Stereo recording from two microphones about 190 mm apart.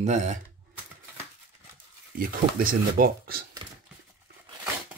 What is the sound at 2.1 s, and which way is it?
Speech, 50° right (ahead or behind).